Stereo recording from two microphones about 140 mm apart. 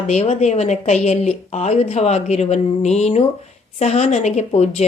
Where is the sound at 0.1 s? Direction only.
50° left (ahead or behind).